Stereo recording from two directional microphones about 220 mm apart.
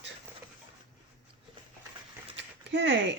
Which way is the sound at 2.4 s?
50° right (ahead or behind).